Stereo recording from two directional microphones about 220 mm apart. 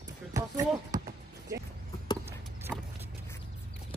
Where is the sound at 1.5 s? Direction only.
15° right (ahead or behind).